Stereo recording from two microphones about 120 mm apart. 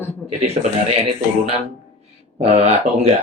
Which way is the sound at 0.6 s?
75° right (ahead or behind).